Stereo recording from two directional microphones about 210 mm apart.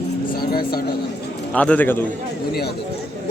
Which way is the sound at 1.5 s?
5° left (ahead or behind).